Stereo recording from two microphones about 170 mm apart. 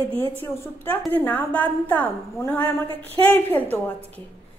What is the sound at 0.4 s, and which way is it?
A woman's voice, 10° left (ahead or behind).